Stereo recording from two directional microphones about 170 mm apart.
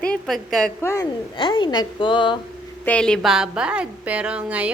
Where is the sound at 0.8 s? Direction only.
15° left (ahead or behind).